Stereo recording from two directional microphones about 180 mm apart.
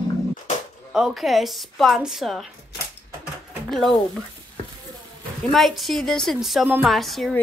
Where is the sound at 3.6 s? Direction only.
Centre (ahead or behind).